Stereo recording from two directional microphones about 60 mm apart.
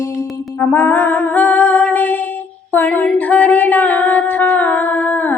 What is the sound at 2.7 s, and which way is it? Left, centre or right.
Music, left.